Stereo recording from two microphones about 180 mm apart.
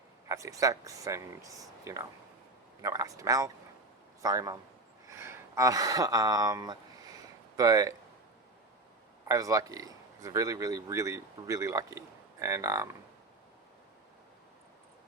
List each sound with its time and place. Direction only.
0.3 s speech: 20° right (ahead or behind)
5.0 s a sound: 15° right (ahead or behind)
9.2 s speech: 20° right (ahead or behind)